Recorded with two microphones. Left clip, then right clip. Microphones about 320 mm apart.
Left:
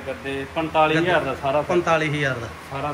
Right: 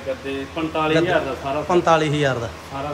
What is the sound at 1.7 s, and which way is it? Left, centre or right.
Speech, centre.